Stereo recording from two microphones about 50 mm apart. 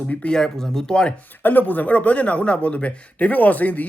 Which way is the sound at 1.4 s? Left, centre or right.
Left.